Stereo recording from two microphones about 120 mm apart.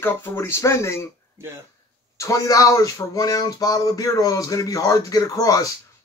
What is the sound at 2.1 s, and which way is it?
Speech, 25° left (ahead or behind).